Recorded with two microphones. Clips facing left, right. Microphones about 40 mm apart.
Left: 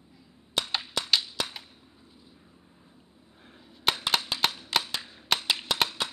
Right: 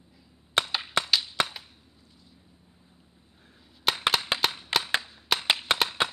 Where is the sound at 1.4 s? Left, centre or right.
Right.